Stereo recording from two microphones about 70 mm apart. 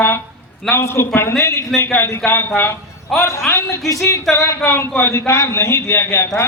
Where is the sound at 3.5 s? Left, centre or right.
Left.